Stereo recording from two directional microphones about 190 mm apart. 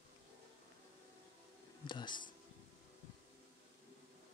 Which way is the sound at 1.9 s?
25° left (ahead or behind).